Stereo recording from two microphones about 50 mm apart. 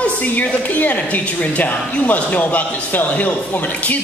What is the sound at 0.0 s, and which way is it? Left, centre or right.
A woman's voice, left.